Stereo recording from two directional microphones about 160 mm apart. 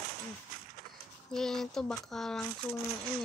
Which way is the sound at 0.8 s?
65° right (ahead or behind).